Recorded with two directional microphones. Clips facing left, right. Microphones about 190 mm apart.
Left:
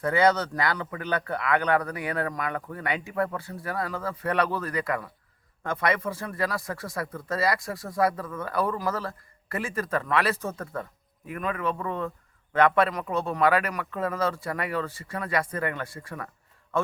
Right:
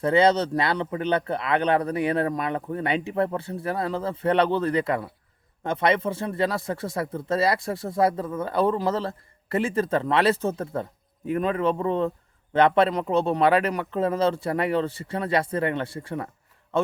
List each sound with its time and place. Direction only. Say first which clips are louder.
0.0 s speech: right 3 dB; 25° right (ahead or behind)